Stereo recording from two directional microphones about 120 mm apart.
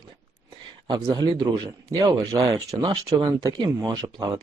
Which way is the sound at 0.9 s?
35° right (ahead or behind).